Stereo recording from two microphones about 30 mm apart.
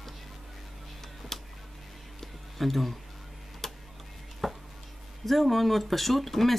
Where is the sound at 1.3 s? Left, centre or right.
Centre.